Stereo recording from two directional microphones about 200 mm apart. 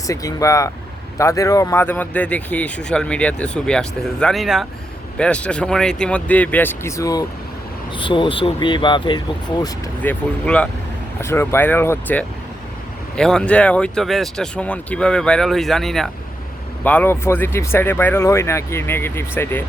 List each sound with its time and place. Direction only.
0.1 s speech: 15° left (ahead or behind)
10.0 s speech: 5° left (ahead or behind)